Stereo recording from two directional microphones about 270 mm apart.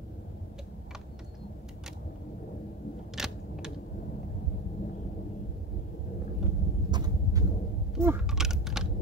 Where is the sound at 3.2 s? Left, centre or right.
Centre.